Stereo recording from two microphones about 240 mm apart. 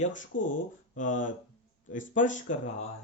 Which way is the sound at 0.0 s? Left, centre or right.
Left.